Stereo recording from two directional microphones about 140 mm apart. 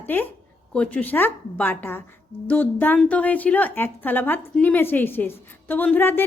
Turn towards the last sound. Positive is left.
turn(degrees=15)  # may be behind; listen again after turning